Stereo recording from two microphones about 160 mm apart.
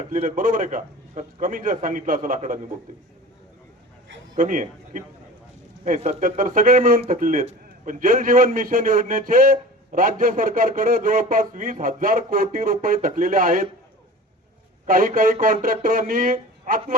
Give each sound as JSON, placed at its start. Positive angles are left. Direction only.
{"t": 0.1, "sound": "a man's voice", "side_deg": -55}
{"t": 4.4, "sound": "a man's voice", "side_deg": -55}
{"t": 14.8, "sound": "a man's voice", "side_deg": -60}